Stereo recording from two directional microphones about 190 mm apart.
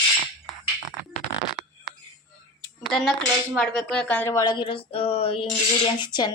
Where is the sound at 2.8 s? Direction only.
Centre (ahead or behind).